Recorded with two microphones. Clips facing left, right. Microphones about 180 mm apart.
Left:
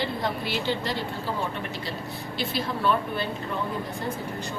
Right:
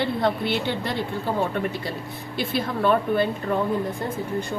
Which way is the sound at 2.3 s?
55° right (ahead or behind).